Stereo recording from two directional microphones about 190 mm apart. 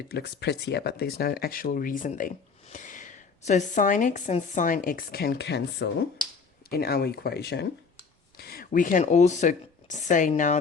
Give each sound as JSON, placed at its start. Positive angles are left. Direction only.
{"t": 0.1, "sound": "speech", "side_deg": 60}